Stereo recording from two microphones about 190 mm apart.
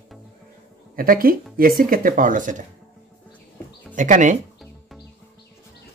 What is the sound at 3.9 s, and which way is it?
Speech, 40° right (ahead or behind).